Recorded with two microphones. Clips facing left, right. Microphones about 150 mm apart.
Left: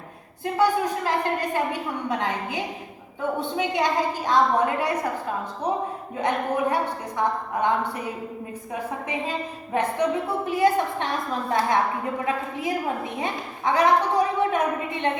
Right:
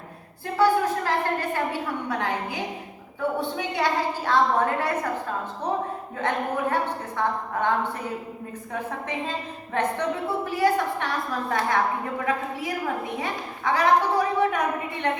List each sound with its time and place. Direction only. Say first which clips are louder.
0.4 s a woman's voice: right 1 dB; 15° left (ahead or behind)
3.6 s a woman's voice: left 3 dB; 20° left (ahead or behind)
6.1 s a woman's voice: left 2 dB; 15° left (ahead or behind)
8.7 s a woman's voice: left 1 dB; 10° left (ahead or behind)